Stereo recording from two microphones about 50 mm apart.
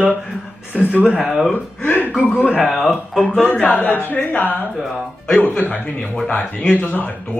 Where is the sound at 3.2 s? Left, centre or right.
Centre.